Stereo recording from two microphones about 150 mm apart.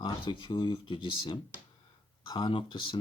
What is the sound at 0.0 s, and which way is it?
Speech, 30° left (ahead or behind).